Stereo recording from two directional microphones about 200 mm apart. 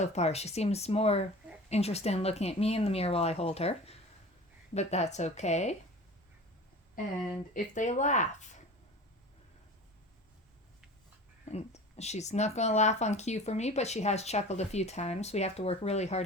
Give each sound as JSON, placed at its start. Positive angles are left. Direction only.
{"t": 0.0, "sound": "speech", "side_deg": 35}
{"t": 7.5, "sound": "speech", "side_deg": 40}
{"t": 11.5, "sound": "speech", "side_deg": 35}